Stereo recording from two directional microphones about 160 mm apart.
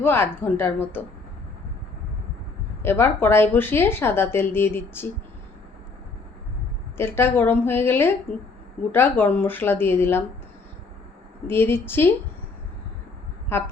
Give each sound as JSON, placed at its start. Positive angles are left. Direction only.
{"t": 0.0, "sound": "a woman's voice", "side_deg": 15}
{"t": 2.8, "sound": "a woman's voice", "side_deg": 15}
{"t": 6.9, "sound": "a woman's voice", "side_deg": 15}
{"t": 11.4, "sound": "a woman's voice", "side_deg": 15}
{"t": 13.5, "sound": "a woman's voice", "side_deg": 15}